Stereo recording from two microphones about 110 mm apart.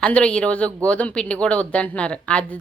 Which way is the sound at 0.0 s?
10° left (ahead or behind).